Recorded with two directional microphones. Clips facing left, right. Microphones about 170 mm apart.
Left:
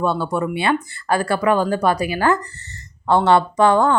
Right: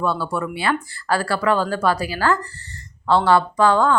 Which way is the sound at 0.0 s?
20° left (ahead or behind).